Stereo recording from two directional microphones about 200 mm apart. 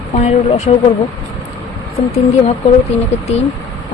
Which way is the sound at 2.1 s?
30° left (ahead or behind).